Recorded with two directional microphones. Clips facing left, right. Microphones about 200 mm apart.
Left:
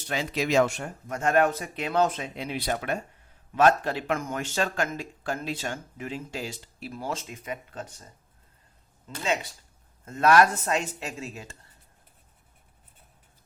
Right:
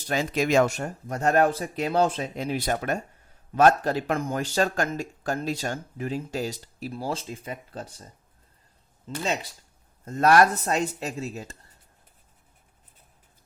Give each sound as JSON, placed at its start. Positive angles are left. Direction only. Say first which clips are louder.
{"t": 0.1, "sound": "speech", "louder": "right 3 dB", "side_deg": -45}
{"t": 10.1, "sound": "speech", "louder": "right 1 dB", "side_deg": -40}